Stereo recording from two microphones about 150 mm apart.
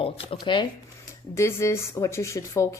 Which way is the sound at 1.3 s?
20° left (ahead or behind).